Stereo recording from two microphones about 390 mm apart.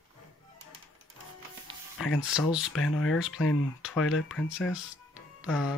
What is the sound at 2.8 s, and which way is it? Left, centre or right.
Speech, left.